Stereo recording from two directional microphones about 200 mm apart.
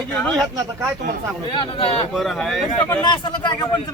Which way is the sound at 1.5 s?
30° left (ahead or behind).